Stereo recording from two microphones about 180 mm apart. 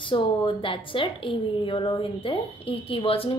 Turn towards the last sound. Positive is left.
turn(degrees=30)  # may be behind; listen again after turning